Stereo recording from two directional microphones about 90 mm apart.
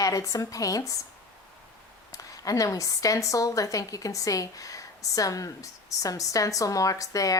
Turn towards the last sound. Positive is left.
turn(degrees=40)  # may be behind; listen again after turning